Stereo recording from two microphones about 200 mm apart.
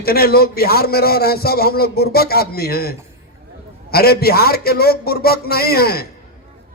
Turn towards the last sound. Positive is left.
turn(degrees=50)  # may be behind; listen again after turning